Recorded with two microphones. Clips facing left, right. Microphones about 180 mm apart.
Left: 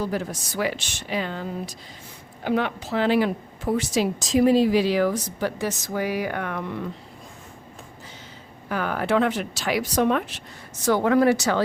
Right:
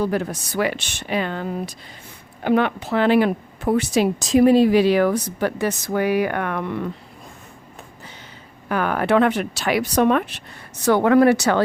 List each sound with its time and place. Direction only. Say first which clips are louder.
0.0 s speech: right 5 dB; 60° right (ahead or behind)
8.7 s speech: right 4 dB; 65° right (ahead or behind)